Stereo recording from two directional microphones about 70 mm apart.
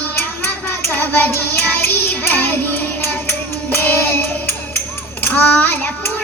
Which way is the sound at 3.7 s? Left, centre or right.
Left.